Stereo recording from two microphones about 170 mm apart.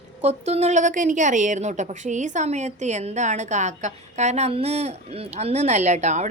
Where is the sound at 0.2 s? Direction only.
40° right (ahead or behind).